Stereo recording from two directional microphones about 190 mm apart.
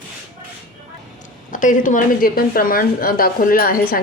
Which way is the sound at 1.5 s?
45° left (ahead or behind).